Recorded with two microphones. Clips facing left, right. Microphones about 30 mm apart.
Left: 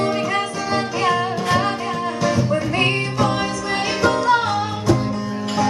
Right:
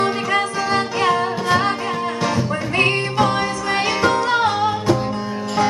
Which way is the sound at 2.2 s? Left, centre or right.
Right.